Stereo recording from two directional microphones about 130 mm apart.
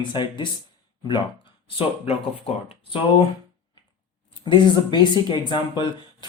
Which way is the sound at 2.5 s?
45° left (ahead or behind).